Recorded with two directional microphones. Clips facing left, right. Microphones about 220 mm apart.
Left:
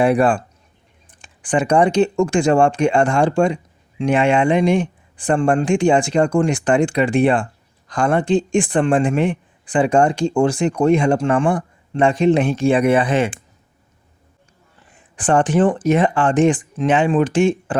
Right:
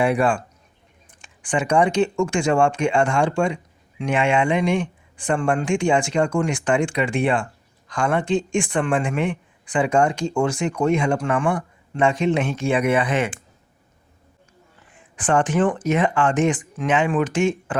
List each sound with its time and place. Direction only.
0.0 s speech: 35° left (ahead or behind)
15.1 s speech: 30° left (ahead or behind)